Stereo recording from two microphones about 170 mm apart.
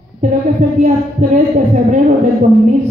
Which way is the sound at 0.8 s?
45° right (ahead or behind).